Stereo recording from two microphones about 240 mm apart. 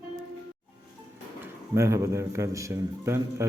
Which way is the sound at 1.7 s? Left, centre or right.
Centre.